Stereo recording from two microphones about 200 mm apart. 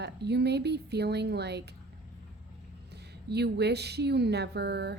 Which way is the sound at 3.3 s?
55° right (ahead or behind).